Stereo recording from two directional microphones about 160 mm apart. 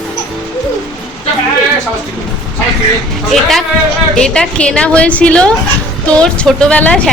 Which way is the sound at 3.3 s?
Centre (ahead or behind).